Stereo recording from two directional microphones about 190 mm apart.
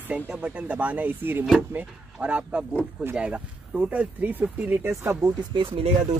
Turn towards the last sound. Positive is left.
turn(degrees=-30)  # may be behind; listen again after turning